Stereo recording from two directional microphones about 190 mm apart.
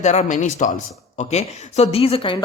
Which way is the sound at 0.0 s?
35° left (ahead or behind).